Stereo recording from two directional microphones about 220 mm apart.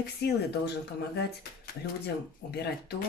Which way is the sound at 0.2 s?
50° left (ahead or behind).